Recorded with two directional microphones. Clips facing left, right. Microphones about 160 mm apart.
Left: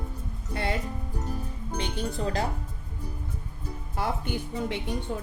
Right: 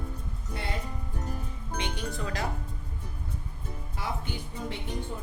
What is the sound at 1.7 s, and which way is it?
Speech, 35° left (ahead or behind).